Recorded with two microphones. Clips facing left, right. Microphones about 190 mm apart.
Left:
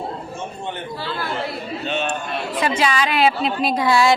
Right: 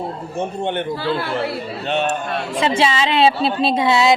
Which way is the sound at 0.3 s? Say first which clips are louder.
Right 7 dB; 65° right (ahead or behind).